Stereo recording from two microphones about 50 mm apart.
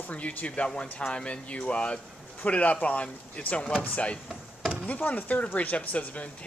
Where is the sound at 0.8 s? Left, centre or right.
Left.